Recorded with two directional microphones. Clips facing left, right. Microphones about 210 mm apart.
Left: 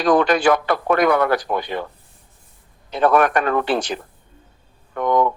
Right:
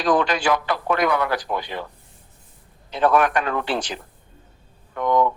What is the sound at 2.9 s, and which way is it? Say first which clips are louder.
A man's voice: left 2 dB; 50° left (ahead or behind).